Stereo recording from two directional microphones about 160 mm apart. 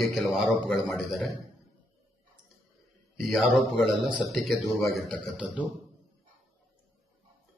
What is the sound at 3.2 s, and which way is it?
A man's voice, centre (ahead or behind).